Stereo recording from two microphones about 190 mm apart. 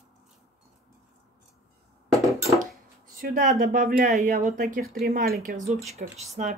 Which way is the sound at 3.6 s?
50° right (ahead or behind).